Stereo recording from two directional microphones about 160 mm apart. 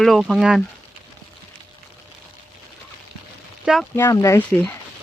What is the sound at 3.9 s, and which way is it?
Speech, 15° left (ahead or behind).